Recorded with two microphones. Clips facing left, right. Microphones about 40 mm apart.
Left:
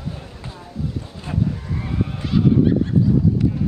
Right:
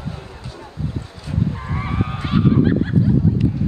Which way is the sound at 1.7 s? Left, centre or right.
Right.